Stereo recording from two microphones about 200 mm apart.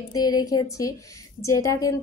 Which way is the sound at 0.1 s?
20° left (ahead or behind).